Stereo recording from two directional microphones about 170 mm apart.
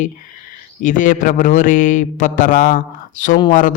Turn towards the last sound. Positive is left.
turn(degrees=50)  # may be behind; listen again after turning